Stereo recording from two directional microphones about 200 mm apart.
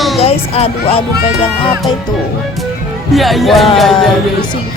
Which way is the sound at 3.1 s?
Centre (ahead or behind).